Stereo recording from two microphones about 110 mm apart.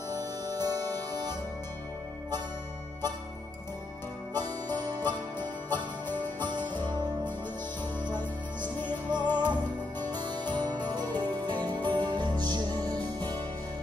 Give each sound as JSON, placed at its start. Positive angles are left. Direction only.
{"t": 0.1, "sound": "music", "side_deg": -35}
{"t": 4.3, "sound": "music", "side_deg": -35}
{"t": 8.1, "sound": "music", "side_deg": -45}